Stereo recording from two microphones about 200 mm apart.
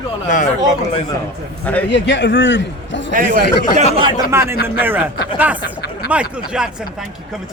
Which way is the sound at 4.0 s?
25° right (ahead or behind).